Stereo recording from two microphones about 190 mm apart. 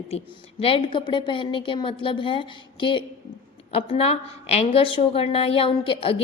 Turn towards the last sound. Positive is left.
turn(degrees=30)  # may be behind; listen again after turning